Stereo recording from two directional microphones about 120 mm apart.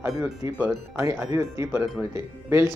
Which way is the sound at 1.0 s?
25° right (ahead or behind).